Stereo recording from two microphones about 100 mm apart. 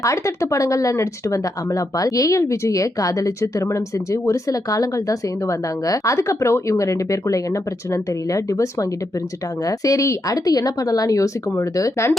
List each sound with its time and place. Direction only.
0.0 s speech: 30° left (ahead or behind)